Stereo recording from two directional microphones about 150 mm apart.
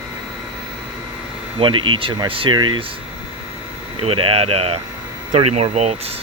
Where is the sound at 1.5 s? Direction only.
35° right (ahead or behind).